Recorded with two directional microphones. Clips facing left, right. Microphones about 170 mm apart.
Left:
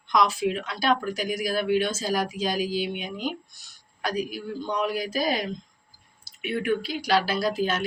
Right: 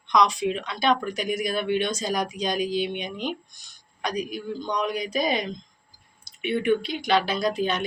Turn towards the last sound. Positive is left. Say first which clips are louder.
# even
turn(degrees=0)  # may be behind; listen again after turning